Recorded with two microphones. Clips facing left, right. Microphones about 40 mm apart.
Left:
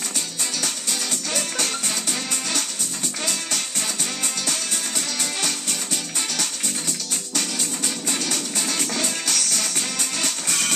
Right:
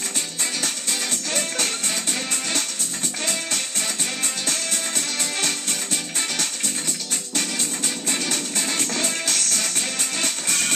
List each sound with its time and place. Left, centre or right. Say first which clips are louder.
4.5 s music: right 1 dB; centre
8.1 s music: right 1 dB; centre